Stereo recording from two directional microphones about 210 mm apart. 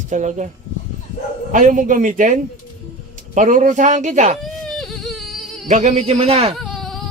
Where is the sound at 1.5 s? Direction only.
40° right (ahead or behind).